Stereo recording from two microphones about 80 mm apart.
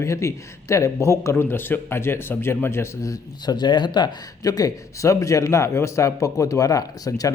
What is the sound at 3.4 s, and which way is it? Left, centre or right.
Speech, left.